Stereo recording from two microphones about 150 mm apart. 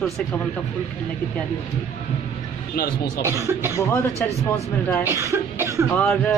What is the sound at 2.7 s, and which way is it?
Speech, 90° left.